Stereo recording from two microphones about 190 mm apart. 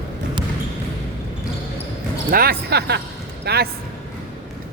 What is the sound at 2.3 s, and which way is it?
Speech, 50° right (ahead or behind).